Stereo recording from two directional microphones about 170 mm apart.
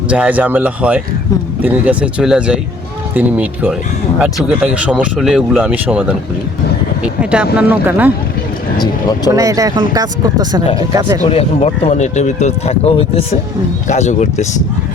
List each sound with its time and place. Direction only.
0.1 s speech: 10° right (ahead or behind)
8.8 s speech: 25° left (ahead or behind)
9.3 s speech: 20° right (ahead or behind)
11.3 s speech: 35° left (ahead or behind)